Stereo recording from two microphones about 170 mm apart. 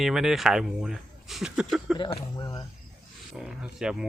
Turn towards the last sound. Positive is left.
turn(degrees=-5)  # may be behind; listen again after turning